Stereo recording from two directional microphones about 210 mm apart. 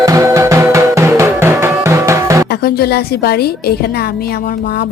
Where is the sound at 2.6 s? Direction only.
50° left (ahead or behind).